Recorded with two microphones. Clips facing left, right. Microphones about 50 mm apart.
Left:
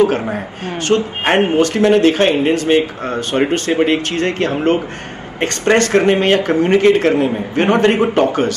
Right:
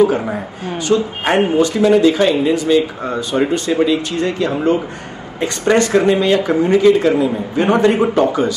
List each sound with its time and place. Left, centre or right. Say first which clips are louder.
0.8 s a man's voice: left 1 dB; left